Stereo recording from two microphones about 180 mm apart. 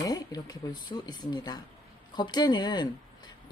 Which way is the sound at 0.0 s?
20° left (ahead or behind).